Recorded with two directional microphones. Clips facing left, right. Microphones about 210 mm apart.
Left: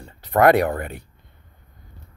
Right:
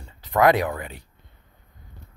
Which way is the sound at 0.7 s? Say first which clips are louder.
Left 4 dB; 50° left (ahead or behind).